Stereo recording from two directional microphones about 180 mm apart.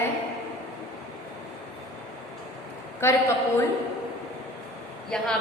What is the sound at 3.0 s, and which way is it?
Speech, 15° left (ahead or behind).